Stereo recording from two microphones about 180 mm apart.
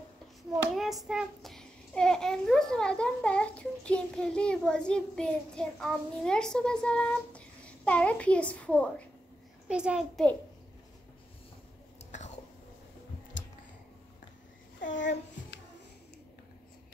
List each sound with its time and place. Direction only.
0.7 s a child's voice: centre (ahead or behind)
9.7 s a child's voice: 5° right (ahead or behind)
15.0 s a sound: 75° left (ahead or behind)